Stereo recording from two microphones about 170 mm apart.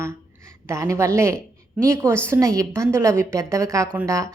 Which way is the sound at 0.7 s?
15° right (ahead or behind).